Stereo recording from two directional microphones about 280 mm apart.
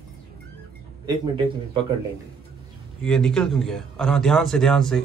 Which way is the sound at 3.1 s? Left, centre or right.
Centre.